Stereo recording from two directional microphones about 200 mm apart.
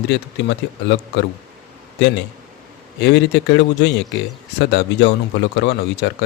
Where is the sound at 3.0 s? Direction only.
60° left (ahead or behind).